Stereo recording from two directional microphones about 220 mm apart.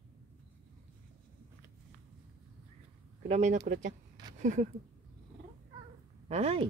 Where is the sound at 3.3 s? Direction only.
30° right (ahead or behind).